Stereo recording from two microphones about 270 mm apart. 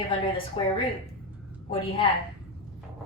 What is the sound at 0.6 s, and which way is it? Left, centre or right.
Speech, left.